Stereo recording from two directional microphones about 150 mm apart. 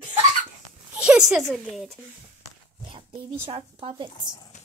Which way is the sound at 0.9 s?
5° right (ahead or behind).